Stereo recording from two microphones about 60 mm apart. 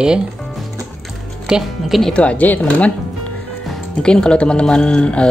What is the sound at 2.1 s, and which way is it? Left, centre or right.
Speech, left.